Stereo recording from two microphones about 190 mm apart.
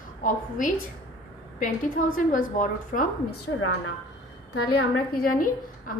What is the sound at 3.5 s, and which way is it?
Speech, 90° left.